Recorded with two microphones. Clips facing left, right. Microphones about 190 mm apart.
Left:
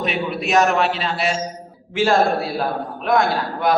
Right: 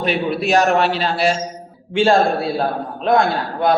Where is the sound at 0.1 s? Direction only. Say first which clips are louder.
Right 4 dB; 35° right (ahead or behind).